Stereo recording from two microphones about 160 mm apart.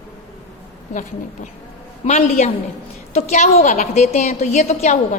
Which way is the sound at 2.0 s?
45° left (ahead or behind).